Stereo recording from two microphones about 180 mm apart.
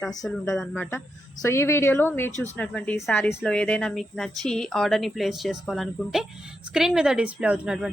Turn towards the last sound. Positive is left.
turn(degrees=-5)  # may be behind; listen again after turning